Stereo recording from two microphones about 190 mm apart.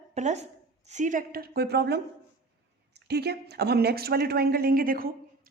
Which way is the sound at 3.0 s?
60° right (ahead or behind).